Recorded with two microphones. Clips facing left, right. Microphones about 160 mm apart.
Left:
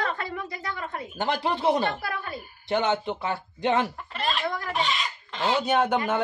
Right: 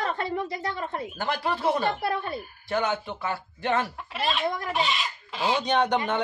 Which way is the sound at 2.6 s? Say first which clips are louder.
Left 3 dB; 25° left (ahead or behind).